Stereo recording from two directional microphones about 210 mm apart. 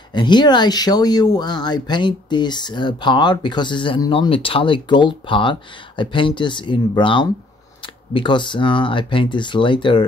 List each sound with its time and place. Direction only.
0.1 s speech: 20° left (ahead or behind)